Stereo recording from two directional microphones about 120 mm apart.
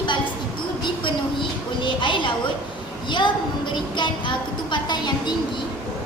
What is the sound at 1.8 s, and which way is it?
Speech, 45° left (ahead or behind).